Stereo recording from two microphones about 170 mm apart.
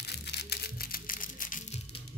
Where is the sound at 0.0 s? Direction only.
75° left (ahead or behind); by 1.8 s 50° left (ahead or behind).